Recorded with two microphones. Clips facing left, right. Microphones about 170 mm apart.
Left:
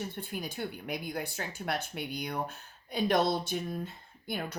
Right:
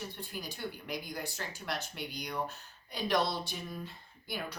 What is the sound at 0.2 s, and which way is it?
A woman's voice, 55° left (ahead or behind).